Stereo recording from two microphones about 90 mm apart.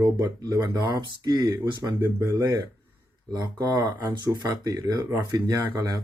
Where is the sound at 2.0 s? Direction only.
25° right (ahead or behind).